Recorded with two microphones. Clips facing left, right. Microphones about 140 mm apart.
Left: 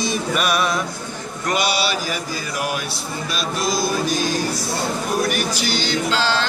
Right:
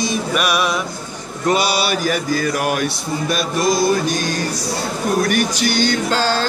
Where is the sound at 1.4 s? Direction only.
35° right (ahead or behind); by 4.4 s 60° right (ahead or behind).